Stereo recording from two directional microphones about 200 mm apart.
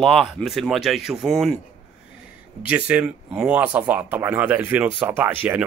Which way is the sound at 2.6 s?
5° right (ahead or behind).